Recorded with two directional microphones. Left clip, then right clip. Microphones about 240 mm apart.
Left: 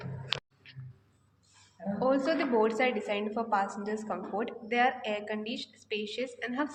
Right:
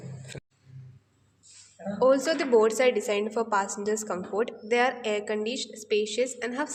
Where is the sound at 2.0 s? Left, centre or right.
Right.